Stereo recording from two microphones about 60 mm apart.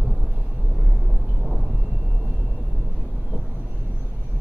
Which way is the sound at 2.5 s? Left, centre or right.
Centre.